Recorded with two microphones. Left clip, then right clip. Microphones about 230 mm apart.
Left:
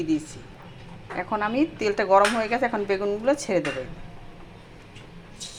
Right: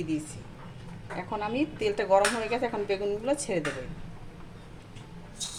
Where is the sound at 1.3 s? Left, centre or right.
Centre.